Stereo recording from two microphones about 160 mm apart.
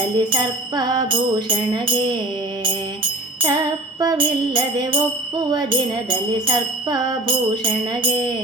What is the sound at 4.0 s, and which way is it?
Music, 25° right (ahead or behind).